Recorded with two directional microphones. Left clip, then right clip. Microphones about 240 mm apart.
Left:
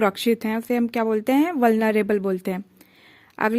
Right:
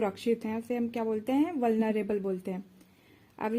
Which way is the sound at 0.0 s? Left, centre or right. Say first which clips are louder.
Left 9 dB; left.